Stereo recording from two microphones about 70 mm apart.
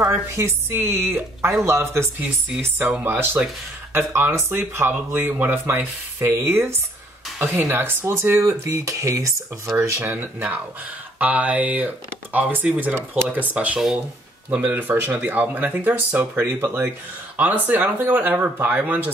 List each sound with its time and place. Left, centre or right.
0.4 s speech: right
8.6 s speech: right
10.1 s speech: right